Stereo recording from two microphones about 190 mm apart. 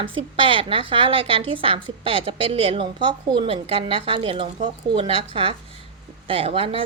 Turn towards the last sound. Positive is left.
turn(degrees=-30)  # may be behind; listen again after turning